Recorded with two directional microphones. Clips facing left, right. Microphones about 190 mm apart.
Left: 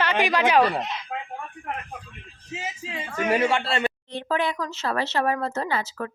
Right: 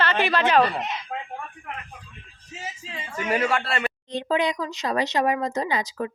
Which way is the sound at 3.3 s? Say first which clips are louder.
Left 1 dB; 25° left (ahead or behind).